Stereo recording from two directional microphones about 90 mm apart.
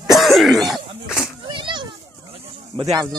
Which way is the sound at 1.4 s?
65° right (ahead or behind).